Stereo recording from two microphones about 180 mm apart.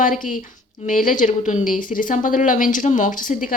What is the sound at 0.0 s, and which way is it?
Speech, 50° left (ahead or behind).